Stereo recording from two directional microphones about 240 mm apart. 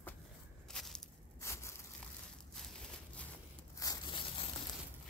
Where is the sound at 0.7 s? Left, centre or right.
Centre.